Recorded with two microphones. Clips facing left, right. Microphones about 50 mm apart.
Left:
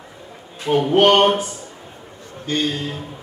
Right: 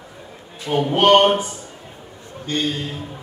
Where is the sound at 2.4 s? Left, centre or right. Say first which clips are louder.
Left 1 dB; centre.